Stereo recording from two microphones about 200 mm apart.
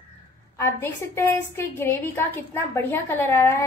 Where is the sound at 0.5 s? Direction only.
15° left (ahead or behind).